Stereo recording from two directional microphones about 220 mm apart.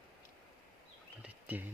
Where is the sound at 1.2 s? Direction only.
5° right (ahead or behind).